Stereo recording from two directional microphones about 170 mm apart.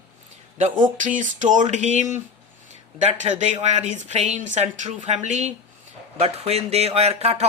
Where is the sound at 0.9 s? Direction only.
50° right (ahead or behind).